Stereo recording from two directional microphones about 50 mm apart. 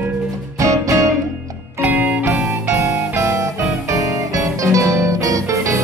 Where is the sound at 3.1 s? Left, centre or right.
Right.